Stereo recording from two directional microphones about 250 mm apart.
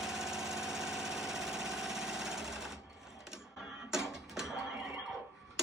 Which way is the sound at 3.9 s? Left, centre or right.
Centre.